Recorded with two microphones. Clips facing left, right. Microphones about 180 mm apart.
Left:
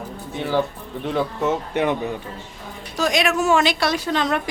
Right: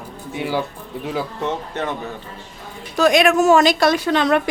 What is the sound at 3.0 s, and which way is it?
A woman's voice, 55° right (ahead or behind).